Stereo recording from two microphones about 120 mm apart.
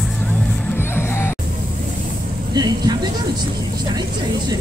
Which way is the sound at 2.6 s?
35° right (ahead or behind).